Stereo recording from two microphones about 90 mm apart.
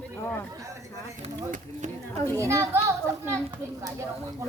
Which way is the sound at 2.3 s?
35° right (ahead or behind).